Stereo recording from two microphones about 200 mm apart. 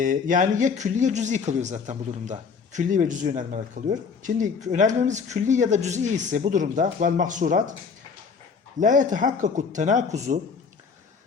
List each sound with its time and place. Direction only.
0.0 s speech: 40° right (ahead or behind)
8.8 s speech: 40° right (ahead or behind)